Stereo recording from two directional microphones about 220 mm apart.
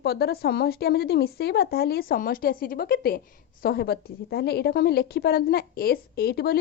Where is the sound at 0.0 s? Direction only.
45° left (ahead or behind).